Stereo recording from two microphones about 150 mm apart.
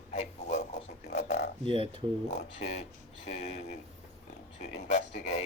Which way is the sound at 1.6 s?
35° right (ahead or behind).